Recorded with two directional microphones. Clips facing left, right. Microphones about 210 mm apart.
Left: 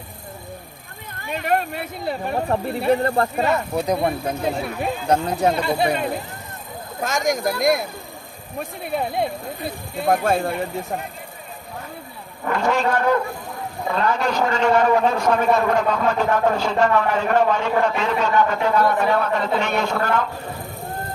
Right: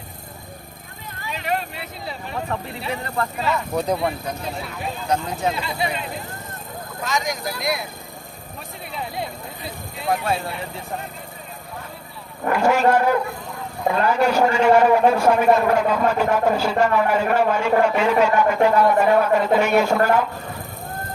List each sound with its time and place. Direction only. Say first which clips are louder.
1.2 s a sound: left 4 dB; 55° left (ahead or behind)
2.8 s speech: left 9 dB; 40° left (ahead or behind)
3.8 s speech: left 1 dB; 10° left (ahead or behind)
4.4 s speech: left 6 dB; 55° left (ahead or behind)
5.2 s speech: left 5 dB; 45° left (ahead or behind)
12.5 s a man's voice: right 3 dB; 10° right (ahead or behind)